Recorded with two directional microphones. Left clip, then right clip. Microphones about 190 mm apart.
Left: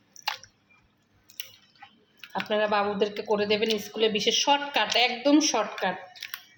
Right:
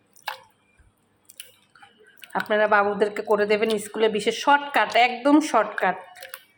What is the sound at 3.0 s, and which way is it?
Speech, 50° right (ahead or behind).